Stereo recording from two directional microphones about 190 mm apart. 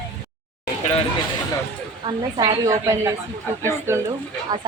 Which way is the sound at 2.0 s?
20° right (ahead or behind).